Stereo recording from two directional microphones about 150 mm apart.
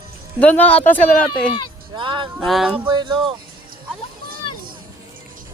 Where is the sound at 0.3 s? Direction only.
10° left (ahead or behind).